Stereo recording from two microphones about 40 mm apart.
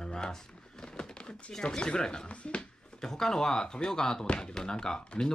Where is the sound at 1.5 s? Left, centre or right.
Centre.